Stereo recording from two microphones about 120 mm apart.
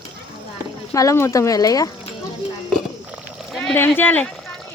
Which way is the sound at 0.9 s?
25° left (ahead or behind).